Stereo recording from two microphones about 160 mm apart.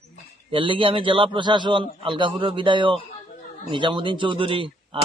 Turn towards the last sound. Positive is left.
turn(degrees=-35)  # may be behind; listen again after turning